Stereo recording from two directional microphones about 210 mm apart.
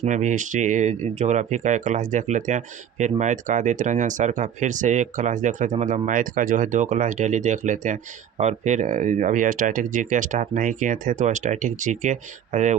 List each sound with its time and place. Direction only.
0.0 s speech: 35° right (ahead or behind)